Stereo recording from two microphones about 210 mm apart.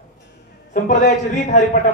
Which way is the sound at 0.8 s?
40° left (ahead or behind).